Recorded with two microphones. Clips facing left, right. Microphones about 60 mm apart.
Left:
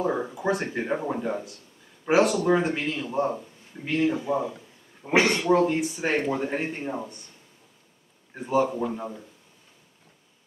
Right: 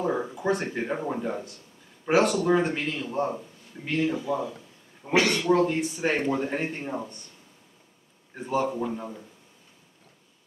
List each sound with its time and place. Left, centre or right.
0.0 s a man's voice: centre
4.2 s speech: left
5.5 s a man's voice: centre
8.4 s a man's voice: centre